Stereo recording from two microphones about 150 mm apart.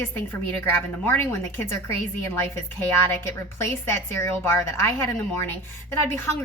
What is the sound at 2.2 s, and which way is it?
A woman's voice, 15° left (ahead or behind).